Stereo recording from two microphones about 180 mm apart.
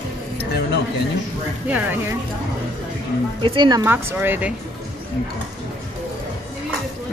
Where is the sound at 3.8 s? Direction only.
10° right (ahead or behind).